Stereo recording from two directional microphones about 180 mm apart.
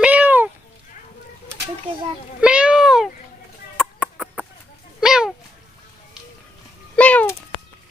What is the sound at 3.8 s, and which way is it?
Chicken, 5° right (ahead or behind).